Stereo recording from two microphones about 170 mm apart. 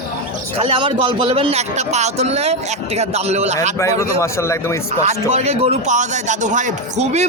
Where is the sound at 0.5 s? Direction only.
30° right (ahead or behind).